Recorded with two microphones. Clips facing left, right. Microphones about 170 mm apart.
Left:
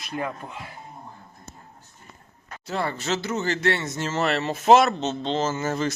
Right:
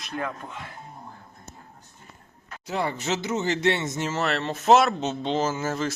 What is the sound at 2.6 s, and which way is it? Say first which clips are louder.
Speech: even; 15° right (ahead or behind).